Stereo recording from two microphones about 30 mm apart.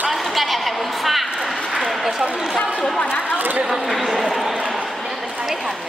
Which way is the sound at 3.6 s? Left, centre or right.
Centre.